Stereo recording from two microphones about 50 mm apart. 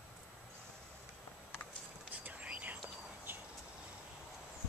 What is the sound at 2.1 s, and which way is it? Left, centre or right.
Whispering, right.